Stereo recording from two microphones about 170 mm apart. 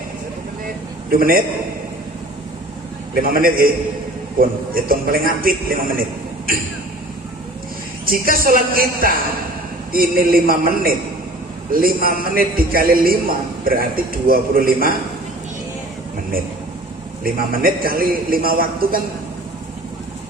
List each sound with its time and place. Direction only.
1.1 s a man's voice: 60° right (ahead or behind)
3.2 s a man's voice: 60° right (ahead or behind)
8.0 s a man's voice: 60° right (ahead or behind)
17.2 s a man's voice: 60° right (ahead or behind)